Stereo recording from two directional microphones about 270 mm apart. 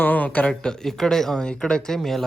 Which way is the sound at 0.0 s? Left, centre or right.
Centre.